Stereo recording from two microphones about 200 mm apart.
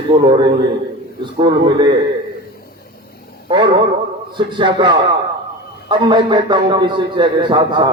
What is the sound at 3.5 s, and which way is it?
A man's voice, 25° right (ahead or behind).